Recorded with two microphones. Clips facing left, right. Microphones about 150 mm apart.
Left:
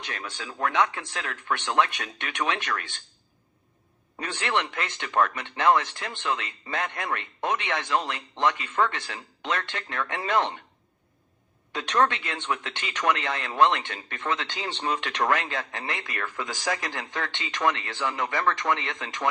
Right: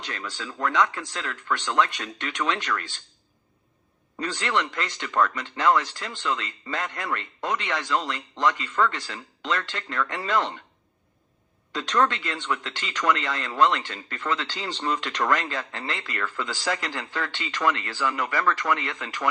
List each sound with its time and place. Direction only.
0.1 s speech: 15° left (ahead or behind)
4.2 s speech: 15° left (ahead or behind)
11.7 s speech: 15° left (ahead or behind)